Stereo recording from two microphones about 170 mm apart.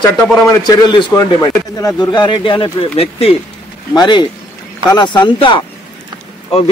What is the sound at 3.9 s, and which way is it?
A man's voice, 25° left (ahead or behind).